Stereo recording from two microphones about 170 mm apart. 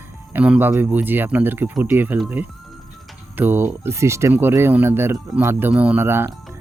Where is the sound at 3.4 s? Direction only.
10° right (ahead or behind).